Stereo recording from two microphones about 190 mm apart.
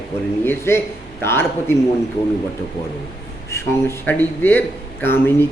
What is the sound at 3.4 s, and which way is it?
A man's voice, 15° left (ahead or behind).